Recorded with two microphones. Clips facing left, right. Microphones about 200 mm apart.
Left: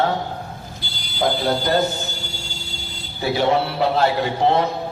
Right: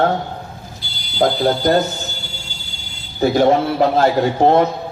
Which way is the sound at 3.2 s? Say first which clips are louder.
Right 5 dB; 45° right (ahead or behind).